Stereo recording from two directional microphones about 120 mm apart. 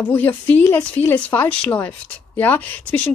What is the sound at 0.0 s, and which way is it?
Speech, 15° left (ahead or behind).